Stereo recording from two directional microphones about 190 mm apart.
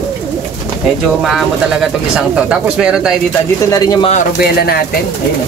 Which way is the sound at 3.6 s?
20° left (ahead or behind).